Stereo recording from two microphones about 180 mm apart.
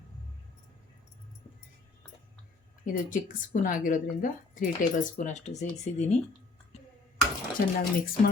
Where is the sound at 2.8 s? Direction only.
50° left (ahead or behind).